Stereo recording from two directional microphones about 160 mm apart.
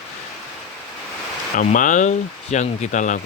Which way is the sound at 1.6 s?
55° left (ahead or behind).